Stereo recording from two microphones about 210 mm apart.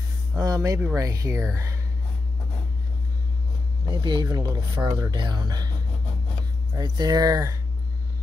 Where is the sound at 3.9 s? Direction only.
20° right (ahead or behind).